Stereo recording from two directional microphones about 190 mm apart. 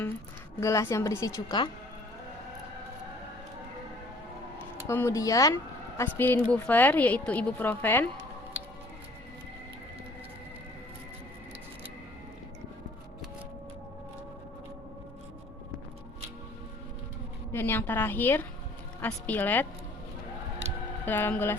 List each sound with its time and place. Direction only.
0.6 s a woman's voice: 15° left (ahead or behind)
4.9 s a woman's voice: 15° left (ahead or behind)
17.5 s a woman's voice: 10° left (ahead or behind)
21.0 s a woman's voice: 10° left (ahead or behind)